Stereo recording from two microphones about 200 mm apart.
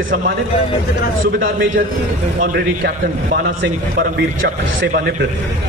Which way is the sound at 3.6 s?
70° right (ahead or behind).